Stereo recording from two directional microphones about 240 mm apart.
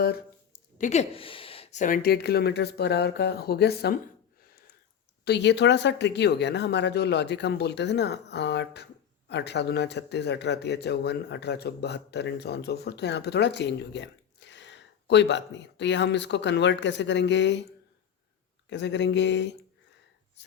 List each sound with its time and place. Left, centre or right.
0.8 s speech: left
5.2 s speech: left
18.7 s speech: left